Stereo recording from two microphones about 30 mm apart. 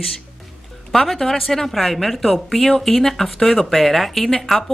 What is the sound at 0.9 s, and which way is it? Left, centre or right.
A woman's voice, centre.